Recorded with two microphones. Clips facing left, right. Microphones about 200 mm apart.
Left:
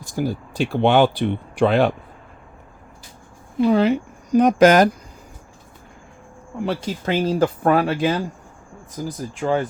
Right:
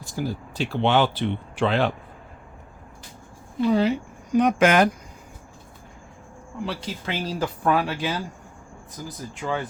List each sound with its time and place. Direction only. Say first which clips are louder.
0.2 s speech: left 5 dB; 50° left (ahead or behind)
3.7 s speech: left 3 dB; 60° left (ahead or behind)
4.3 s speech: left 5 dB; 40° left (ahead or behind)
6.6 s speech: left 6 dB; 45° left (ahead or behind)
9.4 s speech: left 7 dB; 45° left (ahead or behind)